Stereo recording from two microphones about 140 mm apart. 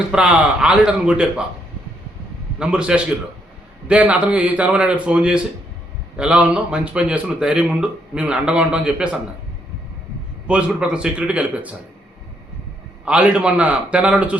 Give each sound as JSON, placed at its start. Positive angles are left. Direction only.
{"t": 0.1, "sound": "a man's voice", "side_deg": -10}
{"t": 2.6, "sound": "a man's voice", "side_deg": -5}
{"t": 10.4, "sound": "a man's voice", "side_deg": -10}
{"t": 13.1, "sound": "a man's voice", "side_deg": -5}